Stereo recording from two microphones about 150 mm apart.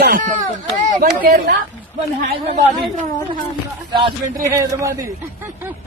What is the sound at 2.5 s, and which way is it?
Speech, 45° right (ahead or behind).